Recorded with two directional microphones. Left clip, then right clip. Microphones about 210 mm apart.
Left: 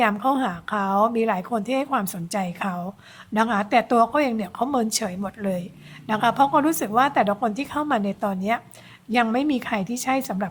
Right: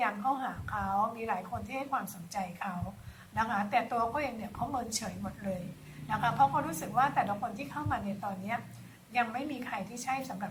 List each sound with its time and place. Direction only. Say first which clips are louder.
0.0 s a woman's voice: left 10 dB; 50° left (ahead or behind)